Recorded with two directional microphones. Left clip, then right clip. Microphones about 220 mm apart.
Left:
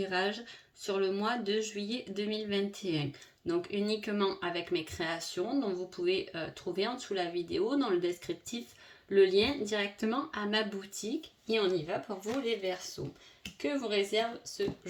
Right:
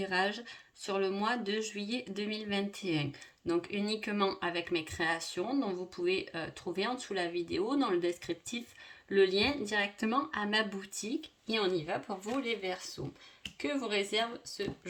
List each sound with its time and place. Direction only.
0.0 s speech: 30° right (ahead or behind)